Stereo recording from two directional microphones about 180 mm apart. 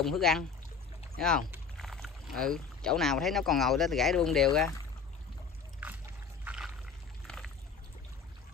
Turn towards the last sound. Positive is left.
turn(degrees=5)  # may be behind; listen again after turning